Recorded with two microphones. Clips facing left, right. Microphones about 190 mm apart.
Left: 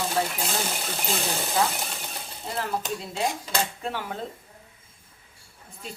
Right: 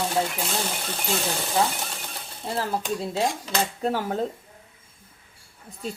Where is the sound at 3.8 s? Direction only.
40° right (ahead or behind).